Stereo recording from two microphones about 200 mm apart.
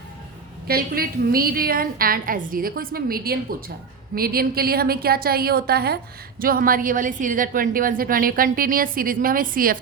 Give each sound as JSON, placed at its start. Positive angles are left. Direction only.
{"t": 0.7, "sound": "a woman's voice", "side_deg": -50}